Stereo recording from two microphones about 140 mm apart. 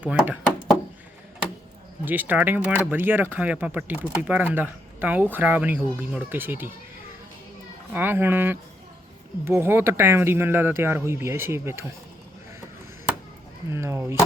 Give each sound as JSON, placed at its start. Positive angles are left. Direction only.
{"t": 0.0, "sound": "speech", "side_deg": -10}
{"t": 2.0, "sound": "speech", "side_deg": -10}
{"t": 7.9, "sound": "speech", "side_deg": -15}
{"t": 13.7, "sound": "speech", "side_deg": -20}